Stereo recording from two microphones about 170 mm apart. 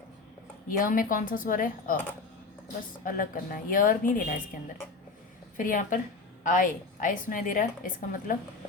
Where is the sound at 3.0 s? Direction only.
55° left (ahead or behind).